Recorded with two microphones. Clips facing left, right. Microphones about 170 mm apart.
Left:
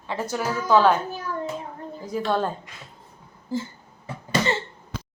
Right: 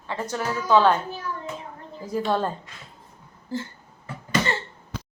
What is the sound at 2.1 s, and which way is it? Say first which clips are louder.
Speech: even; 5° right (ahead or behind).